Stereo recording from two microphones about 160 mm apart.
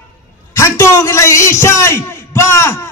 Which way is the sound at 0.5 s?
15° left (ahead or behind).